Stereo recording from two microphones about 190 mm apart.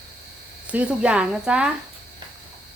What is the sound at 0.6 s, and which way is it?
Speech, 5° right (ahead or behind).